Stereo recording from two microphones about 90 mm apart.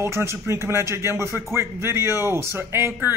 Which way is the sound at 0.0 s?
30° right (ahead or behind).